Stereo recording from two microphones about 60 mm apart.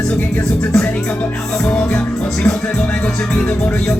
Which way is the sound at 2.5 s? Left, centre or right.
Left.